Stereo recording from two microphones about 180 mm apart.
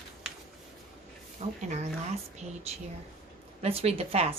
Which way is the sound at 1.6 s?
40° right (ahead or behind).